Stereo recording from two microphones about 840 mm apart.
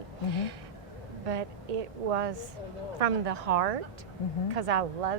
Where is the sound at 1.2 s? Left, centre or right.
Right.